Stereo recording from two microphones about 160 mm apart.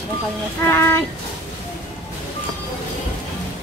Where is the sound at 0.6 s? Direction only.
15° left (ahead or behind).